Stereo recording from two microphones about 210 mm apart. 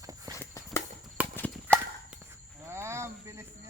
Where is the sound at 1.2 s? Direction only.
5° right (ahead or behind).